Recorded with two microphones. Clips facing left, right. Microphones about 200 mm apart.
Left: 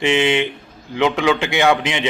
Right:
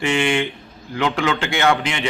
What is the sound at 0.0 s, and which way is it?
A man's voice, 20° left (ahead or behind).